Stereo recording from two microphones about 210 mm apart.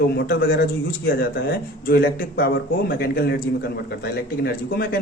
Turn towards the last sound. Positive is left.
turn(degrees=50)  # may be behind; listen again after turning